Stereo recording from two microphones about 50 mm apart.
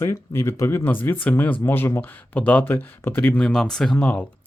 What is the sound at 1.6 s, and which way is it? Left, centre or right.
Speech, left.